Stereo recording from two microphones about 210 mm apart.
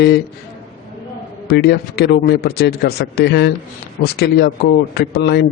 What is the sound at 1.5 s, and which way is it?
A man's voice, 50° left (ahead or behind).